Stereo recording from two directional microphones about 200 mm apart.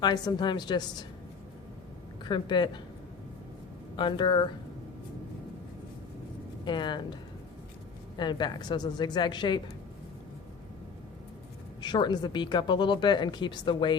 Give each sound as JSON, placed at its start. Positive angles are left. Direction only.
{"t": 0.0, "sound": "speech", "side_deg": 20}
{"t": 2.2, "sound": "speech", "side_deg": 20}
{"t": 3.9, "sound": "speech", "side_deg": 25}
{"t": 6.7, "sound": "speech", "side_deg": 20}
{"t": 8.2, "sound": "speech", "side_deg": 20}
{"t": 11.8, "sound": "speech", "side_deg": 20}